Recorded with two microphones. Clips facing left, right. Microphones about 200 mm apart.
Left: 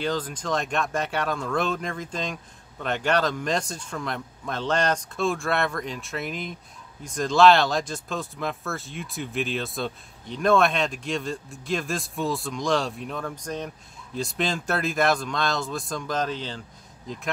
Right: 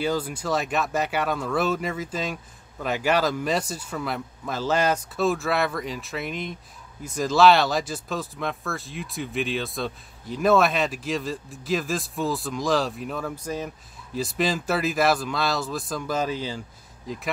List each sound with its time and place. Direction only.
0.0 s speech: 10° right (ahead or behind)